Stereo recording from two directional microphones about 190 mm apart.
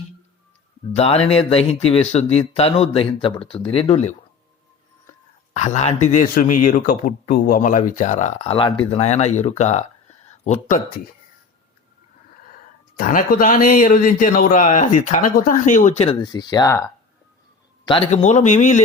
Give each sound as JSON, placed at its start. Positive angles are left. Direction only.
{"t": 0.9, "sound": "speech", "side_deg": 30}
{"t": 5.5, "sound": "speech", "side_deg": 35}
{"t": 13.0, "sound": "a man's voice", "side_deg": 45}
{"t": 17.8, "sound": "speech", "side_deg": 30}